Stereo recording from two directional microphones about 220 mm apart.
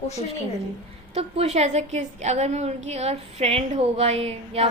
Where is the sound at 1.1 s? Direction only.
25° right (ahead or behind).